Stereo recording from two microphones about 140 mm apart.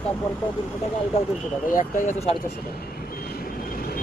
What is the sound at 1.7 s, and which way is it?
Speech, 70° left (ahead or behind).